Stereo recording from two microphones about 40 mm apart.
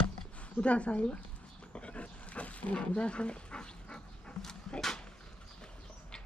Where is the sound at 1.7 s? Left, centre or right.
Left.